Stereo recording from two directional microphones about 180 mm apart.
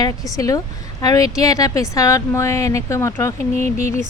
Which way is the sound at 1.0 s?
20° left (ahead or behind).